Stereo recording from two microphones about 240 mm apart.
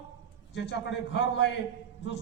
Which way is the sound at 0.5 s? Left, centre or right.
Left.